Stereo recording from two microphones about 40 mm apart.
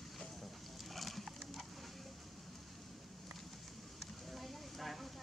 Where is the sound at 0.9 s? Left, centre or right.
Centre.